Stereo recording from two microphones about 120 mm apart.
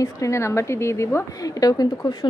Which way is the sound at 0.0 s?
25° left (ahead or behind).